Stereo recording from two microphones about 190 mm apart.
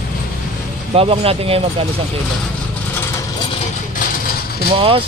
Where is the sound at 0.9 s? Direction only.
30° right (ahead or behind).